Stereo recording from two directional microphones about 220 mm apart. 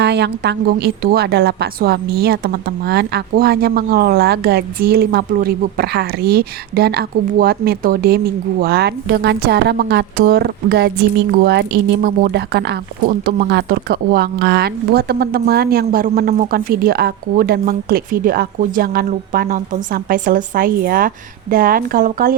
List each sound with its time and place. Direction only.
0.0 s a woman's voice: 50° right (ahead or behind)